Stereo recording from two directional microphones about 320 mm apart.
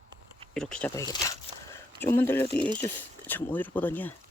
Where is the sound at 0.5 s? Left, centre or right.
Centre.